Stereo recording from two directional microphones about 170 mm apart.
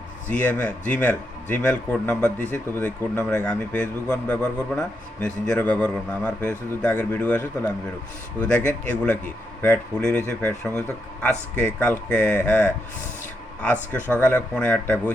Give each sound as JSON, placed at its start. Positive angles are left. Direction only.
{"t": 0.3, "sound": "a man's voice", "side_deg": 10}
{"t": 14.1, "sound": "a man's voice", "side_deg": 10}